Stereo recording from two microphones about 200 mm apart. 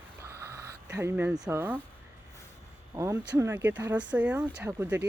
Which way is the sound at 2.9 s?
15° right (ahead or behind).